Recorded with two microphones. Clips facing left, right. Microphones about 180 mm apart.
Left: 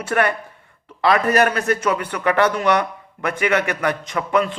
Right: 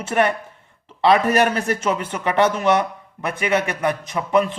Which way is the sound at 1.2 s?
25° right (ahead or behind).